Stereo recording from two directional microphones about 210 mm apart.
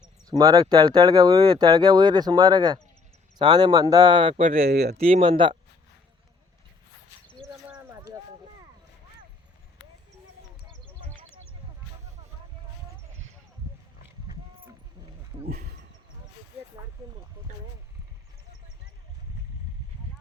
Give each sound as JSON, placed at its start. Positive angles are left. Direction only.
{"t": 0.3, "sound": "speech", "side_deg": -20}
{"t": 4.7, "sound": "speech", "side_deg": -50}
{"t": 4.9, "sound": "speech", "side_deg": -30}
{"t": 7.7, "sound": "a sound", "side_deg": -10}
{"t": 15.3, "sound": "horse", "side_deg": -30}